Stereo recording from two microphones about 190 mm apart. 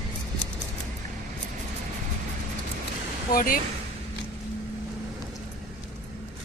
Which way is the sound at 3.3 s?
50° left (ahead or behind).